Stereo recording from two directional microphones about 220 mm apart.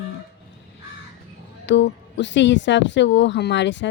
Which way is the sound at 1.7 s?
55° left (ahead or behind).